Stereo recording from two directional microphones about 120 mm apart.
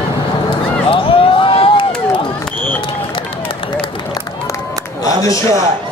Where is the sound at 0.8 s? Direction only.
45° left (ahead or behind).